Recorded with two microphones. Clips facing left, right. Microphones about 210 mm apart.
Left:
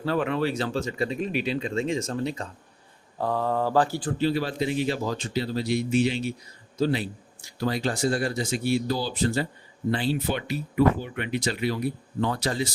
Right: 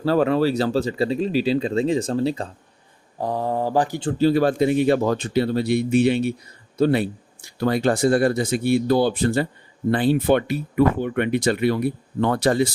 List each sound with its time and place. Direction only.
0.0 s speech: 35° right (ahead or behind)
3.2 s speech: 15° right (ahead or behind)
4.2 s speech: 50° right (ahead or behind)